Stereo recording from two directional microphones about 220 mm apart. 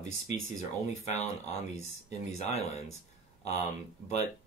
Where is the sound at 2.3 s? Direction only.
30° left (ahead or behind).